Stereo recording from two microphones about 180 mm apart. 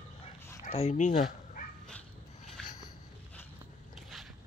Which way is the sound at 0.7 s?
35° left (ahead or behind).